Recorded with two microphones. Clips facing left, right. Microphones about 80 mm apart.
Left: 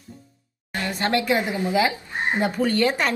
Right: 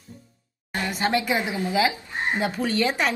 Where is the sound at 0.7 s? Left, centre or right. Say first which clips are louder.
Even; centre.